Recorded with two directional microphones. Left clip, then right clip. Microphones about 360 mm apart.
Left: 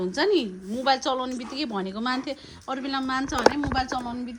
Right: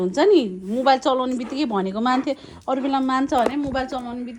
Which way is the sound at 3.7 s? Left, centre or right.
Centre.